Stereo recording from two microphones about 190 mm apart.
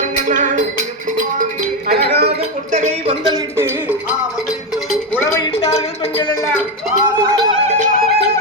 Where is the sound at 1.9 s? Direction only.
60° right (ahead or behind).